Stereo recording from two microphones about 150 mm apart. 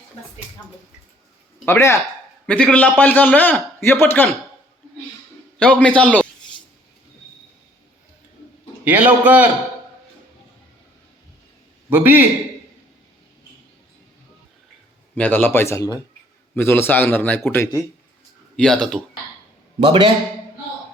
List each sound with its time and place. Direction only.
1.6 s a man's voice: 15° left (ahead or behind)
5.5 s a man's voice: 10° left (ahead or behind)
8.8 s a man's voice: 10° right (ahead or behind)
11.9 s a man's voice: 10° right (ahead or behind)
15.1 s a man's voice: 10° left (ahead or behind)
18.5 s speech: 5° left (ahead or behind)
19.8 s a man's voice: 35° right (ahead or behind)